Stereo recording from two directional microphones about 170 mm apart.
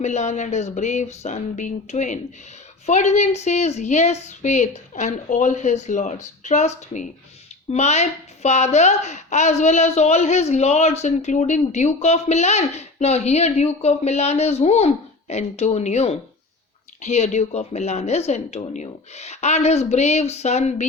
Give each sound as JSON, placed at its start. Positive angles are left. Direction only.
{"t": 0.0, "sound": "a woman's voice", "side_deg": 45}